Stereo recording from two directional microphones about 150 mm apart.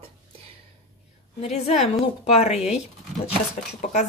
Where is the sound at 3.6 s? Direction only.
60° left (ahead or behind).